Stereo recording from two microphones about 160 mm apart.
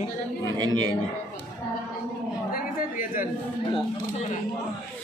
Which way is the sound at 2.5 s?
60° left (ahead or behind).